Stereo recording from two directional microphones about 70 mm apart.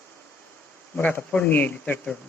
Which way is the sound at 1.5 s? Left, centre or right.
Left.